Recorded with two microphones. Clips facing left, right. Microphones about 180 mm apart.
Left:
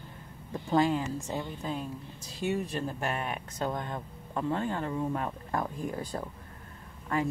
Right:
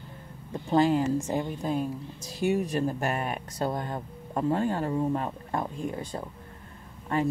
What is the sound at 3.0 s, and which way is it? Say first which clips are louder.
Speech: right 3 dB; 40° right (ahead or behind).